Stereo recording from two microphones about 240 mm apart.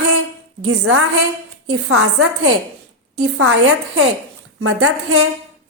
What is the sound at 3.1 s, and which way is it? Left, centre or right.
A woman's voice, right.